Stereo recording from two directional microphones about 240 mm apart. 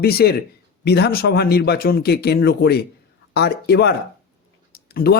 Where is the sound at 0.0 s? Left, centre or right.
Left.